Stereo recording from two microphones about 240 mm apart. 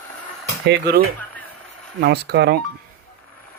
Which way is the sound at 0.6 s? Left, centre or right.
Right.